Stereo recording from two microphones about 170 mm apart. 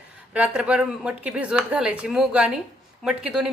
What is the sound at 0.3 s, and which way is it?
A woman's voice, 5° right (ahead or behind).